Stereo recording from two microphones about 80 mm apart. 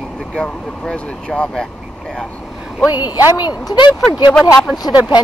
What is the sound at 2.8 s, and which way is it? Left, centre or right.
A woman's voice, left.